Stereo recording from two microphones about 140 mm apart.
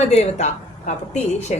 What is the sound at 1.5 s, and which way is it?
Speech, 60° left (ahead or behind).